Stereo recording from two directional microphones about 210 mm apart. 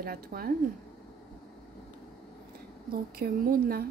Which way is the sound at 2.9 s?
45° right (ahead or behind).